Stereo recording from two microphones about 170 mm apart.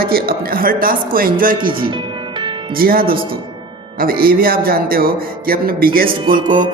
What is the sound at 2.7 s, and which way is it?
Speech, 60° right (ahead or behind).